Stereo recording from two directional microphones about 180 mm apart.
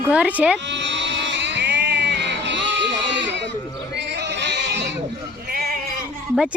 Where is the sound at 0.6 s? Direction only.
85° right.